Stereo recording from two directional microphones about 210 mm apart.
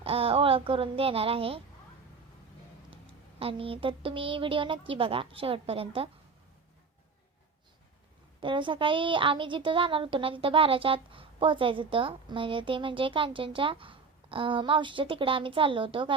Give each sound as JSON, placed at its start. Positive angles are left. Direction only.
{"t": 0.0, "sound": "a woman's voice", "side_deg": -25}
{"t": 2.9, "sound": "a woman's voice", "side_deg": -25}
{"t": 8.4, "sound": "a woman's voice", "side_deg": -25}